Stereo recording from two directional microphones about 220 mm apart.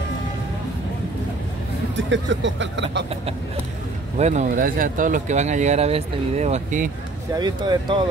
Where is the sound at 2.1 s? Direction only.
55° right (ahead or behind).